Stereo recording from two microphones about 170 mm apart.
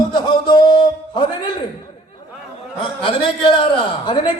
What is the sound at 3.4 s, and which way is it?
Speech, 30° left (ahead or behind).